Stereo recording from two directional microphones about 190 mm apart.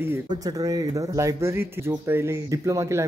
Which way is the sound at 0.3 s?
20° right (ahead or behind).